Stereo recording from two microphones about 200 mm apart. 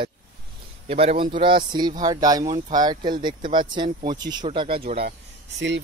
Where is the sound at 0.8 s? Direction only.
30° right (ahead or behind).